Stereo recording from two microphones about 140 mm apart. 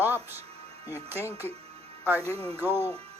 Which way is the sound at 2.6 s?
15° right (ahead or behind).